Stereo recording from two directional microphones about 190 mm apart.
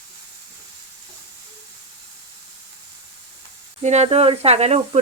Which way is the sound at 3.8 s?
35° right (ahead or behind).